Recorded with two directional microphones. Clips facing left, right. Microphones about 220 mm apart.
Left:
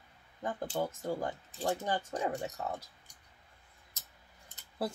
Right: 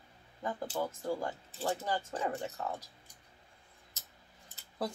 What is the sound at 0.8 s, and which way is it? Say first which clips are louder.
Speech: left 1 dB; 15° left (ahead or behind).